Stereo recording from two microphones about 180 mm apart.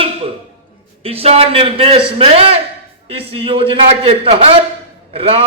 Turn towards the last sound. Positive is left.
turn(degrees=-30)  # may be behind; listen again after turning